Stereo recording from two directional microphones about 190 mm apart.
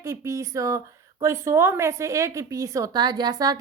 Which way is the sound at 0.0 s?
15° right (ahead or behind).